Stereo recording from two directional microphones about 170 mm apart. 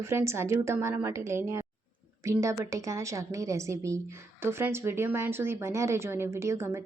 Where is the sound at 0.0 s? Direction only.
15° right (ahead or behind).